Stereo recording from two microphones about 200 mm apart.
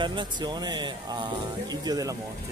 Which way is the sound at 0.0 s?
20° right (ahead or behind).